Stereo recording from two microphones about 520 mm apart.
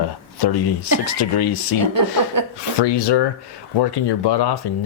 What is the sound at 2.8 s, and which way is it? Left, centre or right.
Speech, left.